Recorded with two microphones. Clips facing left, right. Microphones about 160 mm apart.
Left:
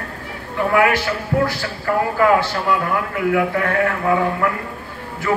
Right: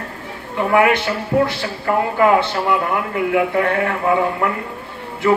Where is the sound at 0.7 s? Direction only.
20° right (ahead or behind).